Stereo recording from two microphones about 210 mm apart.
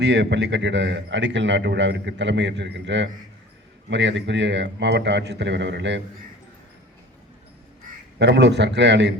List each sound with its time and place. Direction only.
0.0 s a man's voice: 55° right (ahead or behind)
8.2 s a man's voice: 55° right (ahead or behind)